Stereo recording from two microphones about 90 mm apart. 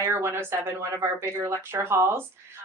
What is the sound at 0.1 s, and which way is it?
A woman's voice, 30° right (ahead or behind).